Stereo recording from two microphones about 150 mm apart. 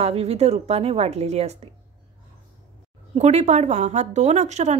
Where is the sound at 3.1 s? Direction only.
50° right (ahead or behind).